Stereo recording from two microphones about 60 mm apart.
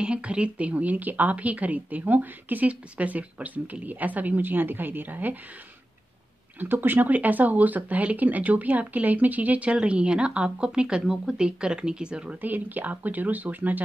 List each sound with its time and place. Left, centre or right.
0.0 s speech: centre
6.6 s speech: right; by 12.4 s centre
12.4 s speech: right